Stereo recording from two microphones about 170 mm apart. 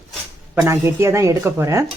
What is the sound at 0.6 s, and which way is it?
Speech, 15° right (ahead or behind).